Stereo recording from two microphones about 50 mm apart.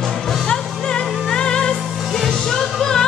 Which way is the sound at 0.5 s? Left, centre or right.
Centre.